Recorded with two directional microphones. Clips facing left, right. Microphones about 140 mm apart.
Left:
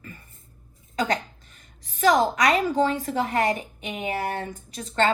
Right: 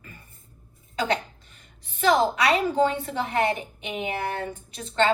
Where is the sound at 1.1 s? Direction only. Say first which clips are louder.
Even; 40° left (ahead or behind).